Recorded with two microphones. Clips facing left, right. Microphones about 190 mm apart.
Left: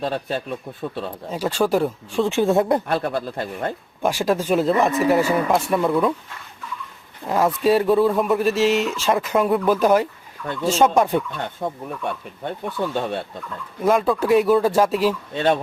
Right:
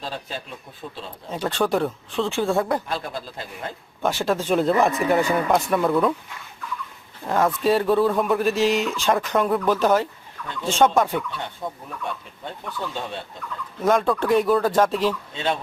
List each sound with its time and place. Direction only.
0.0 s speech: 55° left (ahead or behind)
1.3 s speech: 10° left (ahead or behind)
2.8 s speech: 60° left (ahead or behind)
4.0 s speech: 10° left (ahead or behind)
7.3 s speech: 5° left (ahead or behind)
12.0 s speech: 55° left (ahead or behind)
13.8 s speech: 5° left (ahead or behind)
15.3 s speech: 55° left (ahead or behind)